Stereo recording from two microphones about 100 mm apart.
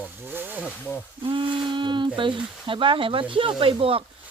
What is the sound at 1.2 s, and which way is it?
Speech, 55° right (ahead or behind).